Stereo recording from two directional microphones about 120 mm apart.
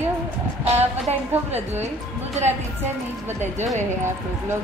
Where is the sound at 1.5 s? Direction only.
65° right (ahead or behind).